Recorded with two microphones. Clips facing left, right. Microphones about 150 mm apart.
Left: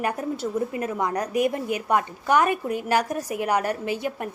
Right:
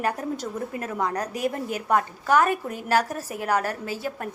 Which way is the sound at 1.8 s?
10° left (ahead or behind).